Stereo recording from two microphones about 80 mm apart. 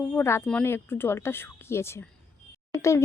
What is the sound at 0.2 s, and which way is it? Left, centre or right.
Speech, left.